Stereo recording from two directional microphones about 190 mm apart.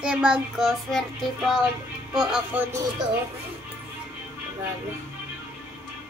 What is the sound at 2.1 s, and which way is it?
Speech, 5° right (ahead or behind).